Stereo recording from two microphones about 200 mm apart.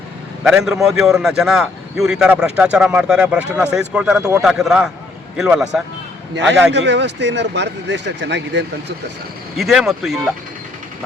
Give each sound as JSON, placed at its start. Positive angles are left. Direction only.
{"t": 0.4, "sound": "a man's voice", "side_deg": 0}
{"t": 6.3, "sound": "speech", "side_deg": -60}
{"t": 9.6, "sound": "a man's voice", "side_deg": 0}